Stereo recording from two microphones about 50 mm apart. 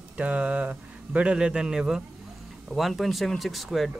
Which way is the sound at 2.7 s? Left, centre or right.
Centre.